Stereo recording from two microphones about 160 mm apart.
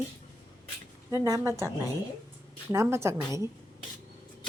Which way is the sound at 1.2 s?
20° right (ahead or behind).